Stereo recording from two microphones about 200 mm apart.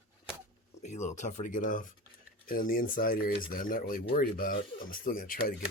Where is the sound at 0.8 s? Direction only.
35° left (ahead or behind).